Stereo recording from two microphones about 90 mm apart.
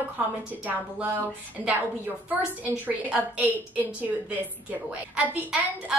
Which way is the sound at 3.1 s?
15° right (ahead or behind).